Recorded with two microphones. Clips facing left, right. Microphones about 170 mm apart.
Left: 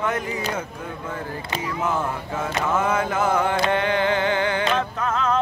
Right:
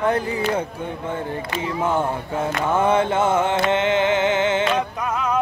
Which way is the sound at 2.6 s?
30° right (ahead or behind).